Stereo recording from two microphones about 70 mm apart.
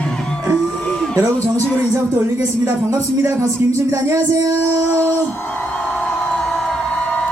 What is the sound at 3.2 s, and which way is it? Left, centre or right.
Speech, right.